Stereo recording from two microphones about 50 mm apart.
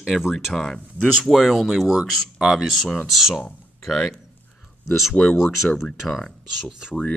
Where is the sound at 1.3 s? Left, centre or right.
Centre.